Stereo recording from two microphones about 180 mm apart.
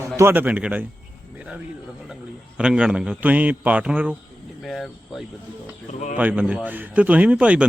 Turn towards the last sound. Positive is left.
turn(degrees=-5)  # may be behind; listen again after turning